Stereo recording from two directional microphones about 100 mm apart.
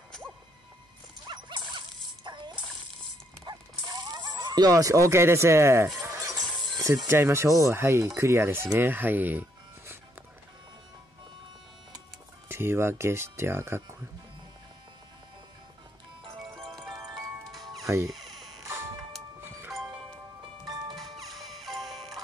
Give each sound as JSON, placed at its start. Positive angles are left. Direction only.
{"t": 1.2, "sound": "dog", "side_deg": -50}
{"t": 3.4, "sound": "a sound", "side_deg": -45}
{"t": 7.1, "sound": "speech", "side_deg": -25}
{"t": 12.4, "sound": "speech", "side_deg": -25}
{"t": 16.4, "sound": "music", "side_deg": 5}
{"t": 17.8, "sound": "speech", "side_deg": -30}
{"t": 18.1, "sound": "a sound", "side_deg": 0}
{"t": 18.6, "sound": "music", "side_deg": -25}
{"t": 20.9, "sound": "music", "side_deg": 0}